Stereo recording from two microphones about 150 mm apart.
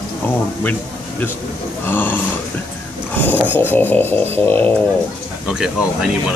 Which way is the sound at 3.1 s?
10° left (ahead or behind).